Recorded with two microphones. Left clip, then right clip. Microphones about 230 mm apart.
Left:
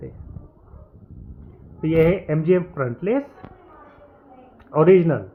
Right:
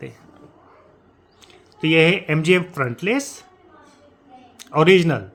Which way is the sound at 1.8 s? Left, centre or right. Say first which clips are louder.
Right 2 dB; right.